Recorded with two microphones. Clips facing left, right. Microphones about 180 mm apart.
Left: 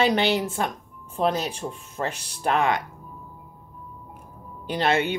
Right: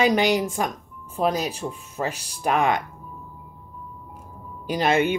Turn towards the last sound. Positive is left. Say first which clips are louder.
# right 2 dB
turn(degrees=-15)  # may be behind; listen again after turning